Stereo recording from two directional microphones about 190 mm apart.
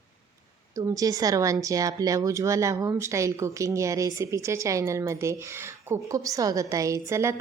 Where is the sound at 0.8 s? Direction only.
20° right (ahead or behind).